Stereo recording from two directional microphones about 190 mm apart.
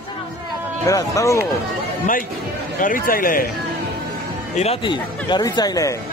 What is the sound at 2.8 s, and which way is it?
Speech, 45° left (ahead or behind).